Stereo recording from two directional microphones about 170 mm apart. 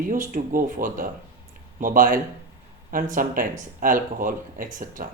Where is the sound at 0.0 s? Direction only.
50° right (ahead or behind).